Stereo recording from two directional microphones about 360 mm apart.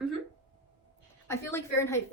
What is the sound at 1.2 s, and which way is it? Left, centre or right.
Speech, centre.